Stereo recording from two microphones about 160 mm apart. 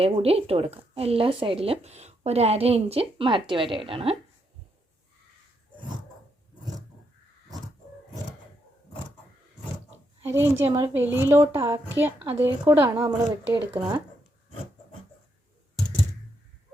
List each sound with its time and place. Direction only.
0.0 s speech: 40° right (ahead or behind)
10.2 s a woman's voice: 15° right (ahead or behind)